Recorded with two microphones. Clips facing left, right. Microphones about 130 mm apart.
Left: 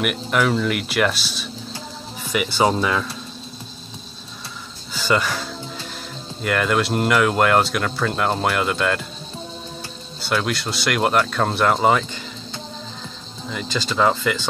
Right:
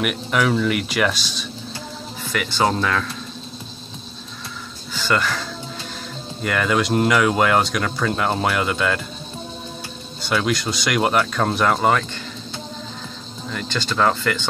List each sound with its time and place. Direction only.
0.0 s speech: centre (ahead or behind)
4.9 s speech: 10° left (ahead or behind)
6.4 s speech: centre (ahead or behind)
10.2 s speech: centre (ahead or behind)
13.5 s speech: 5° left (ahead or behind)